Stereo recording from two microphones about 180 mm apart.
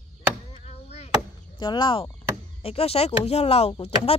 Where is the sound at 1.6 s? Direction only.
25° left (ahead or behind).